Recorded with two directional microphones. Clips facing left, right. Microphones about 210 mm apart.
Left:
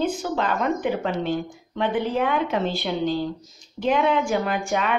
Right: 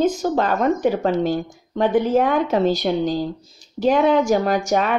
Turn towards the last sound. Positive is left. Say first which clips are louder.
# right 6 dB
turn(degrees=-35)  # may be behind; listen again after turning